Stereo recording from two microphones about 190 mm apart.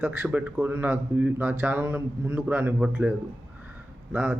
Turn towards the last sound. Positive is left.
turn(degrees=-5)  # may be behind; listen again after turning